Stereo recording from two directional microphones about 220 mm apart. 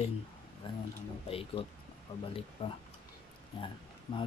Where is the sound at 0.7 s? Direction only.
20° left (ahead or behind).